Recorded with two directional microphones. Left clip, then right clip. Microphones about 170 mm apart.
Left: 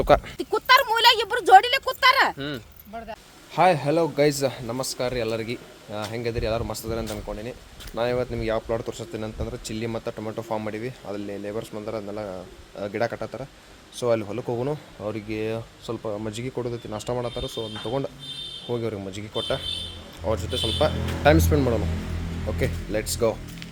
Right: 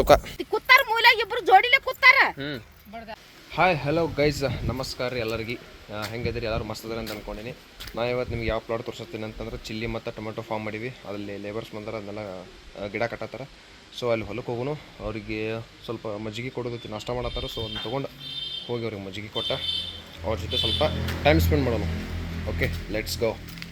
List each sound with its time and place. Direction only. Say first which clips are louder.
0.3 s speech: even; 25° left (ahead or behind)
3.5 s speech: left 3 dB; 10° left (ahead or behind)